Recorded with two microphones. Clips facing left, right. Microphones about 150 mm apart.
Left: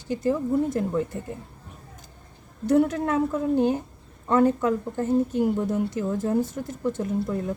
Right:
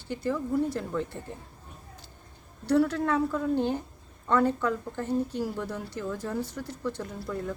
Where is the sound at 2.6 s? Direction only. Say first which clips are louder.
Left 3 dB; 20° left (ahead or behind).